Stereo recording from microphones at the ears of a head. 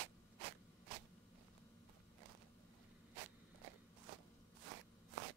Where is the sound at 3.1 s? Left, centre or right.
Right.